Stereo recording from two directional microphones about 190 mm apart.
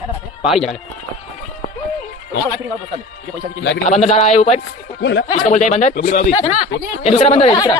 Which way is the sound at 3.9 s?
35° left (ahead or behind).